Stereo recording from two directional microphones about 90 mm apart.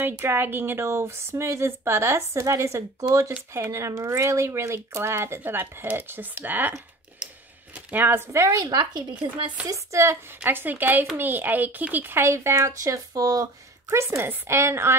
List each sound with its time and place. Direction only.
0.0 s speech: 25° right (ahead or behind)
7.7 s speech: 20° right (ahead or behind)
8.6 s speech: 55° right (ahead or behind)
9.7 s speech: 35° right (ahead or behind)
10.4 s speech: 20° right (ahead or behind); by 13.9 s 40° right (ahead or behind)
13.9 s speech: 25° right (ahead or behind)